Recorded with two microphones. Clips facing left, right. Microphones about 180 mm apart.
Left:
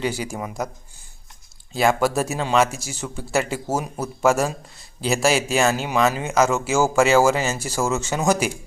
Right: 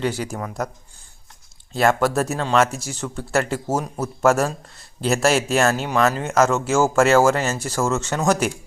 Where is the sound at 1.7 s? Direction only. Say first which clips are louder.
Right 1 dB; centre (ahead or behind).